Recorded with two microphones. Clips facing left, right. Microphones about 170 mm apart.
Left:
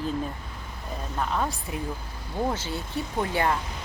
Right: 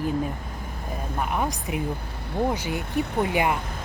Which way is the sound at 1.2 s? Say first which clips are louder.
Right 1 dB; 15° right (ahead or behind).